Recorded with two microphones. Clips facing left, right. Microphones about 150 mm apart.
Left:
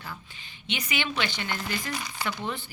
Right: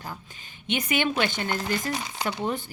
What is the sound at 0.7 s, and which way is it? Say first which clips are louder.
A woman's voice: right 6 dB; 50° right (ahead or behind).